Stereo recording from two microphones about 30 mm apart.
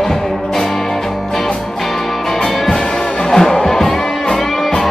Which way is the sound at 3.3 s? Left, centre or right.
Left.